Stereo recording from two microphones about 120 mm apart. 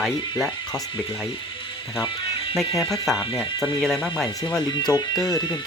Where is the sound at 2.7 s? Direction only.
Centre (ahead or behind).